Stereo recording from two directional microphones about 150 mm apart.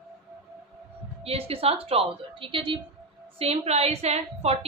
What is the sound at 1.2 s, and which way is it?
A woman's voice, 40° right (ahead or behind).